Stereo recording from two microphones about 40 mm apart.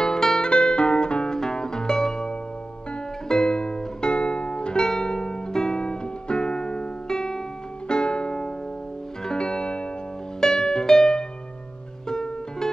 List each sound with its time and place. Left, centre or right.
0.0 s music: centre
0.5 s music: left